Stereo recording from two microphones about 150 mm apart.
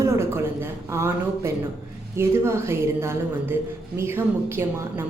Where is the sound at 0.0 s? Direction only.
15° right (ahead or behind).